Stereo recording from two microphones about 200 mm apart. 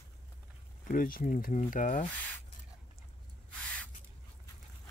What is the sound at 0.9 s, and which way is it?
Speech, 45° left (ahead or behind).